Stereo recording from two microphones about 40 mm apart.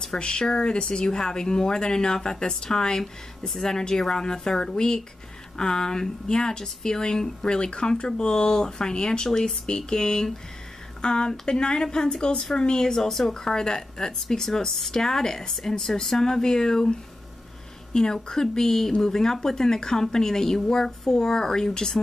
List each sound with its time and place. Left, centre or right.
0.0 s speech: centre
17.9 s speech: centre